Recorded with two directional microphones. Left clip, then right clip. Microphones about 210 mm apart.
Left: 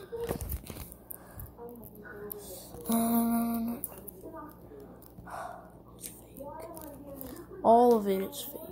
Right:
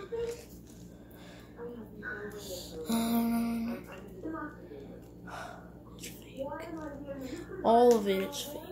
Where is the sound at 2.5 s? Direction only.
20° left (ahead or behind).